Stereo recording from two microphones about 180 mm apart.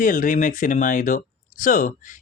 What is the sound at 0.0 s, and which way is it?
Speech, 45° left (ahead or behind).